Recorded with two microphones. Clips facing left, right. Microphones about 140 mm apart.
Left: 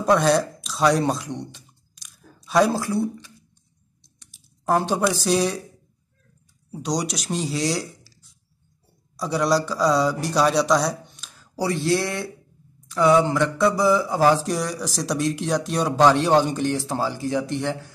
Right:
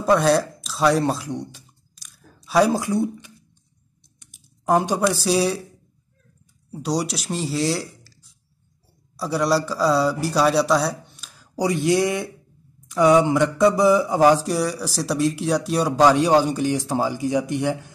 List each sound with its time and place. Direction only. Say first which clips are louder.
0.0 s music: right 1 dB; centre (ahead or behind); by 3.3 s 20° right (ahead or behind)
4.2 s typing: right 2 dB; 15° right (ahead or behind)
4.9 s speech: right 1 dB; centre (ahead or behind)
6.7 s a man's voice: right 2 dB; 5° right (ahead or behind)
11.5 s speech: right 3 dB; 15° right (ahead or behind)
14.4 s speech: right 2 dB; 5° right (ahead or behind)